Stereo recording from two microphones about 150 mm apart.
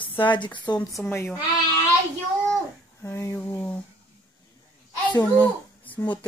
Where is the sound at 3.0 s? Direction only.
15° left (ahead or behind).